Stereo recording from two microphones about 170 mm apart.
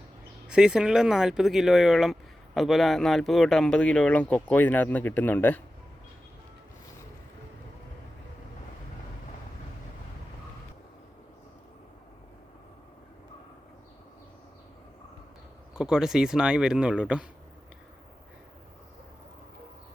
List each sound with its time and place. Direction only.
0.4 s speech: 5° right (ahead or behind)
15.7 s speech: 5° right (ahead or behind)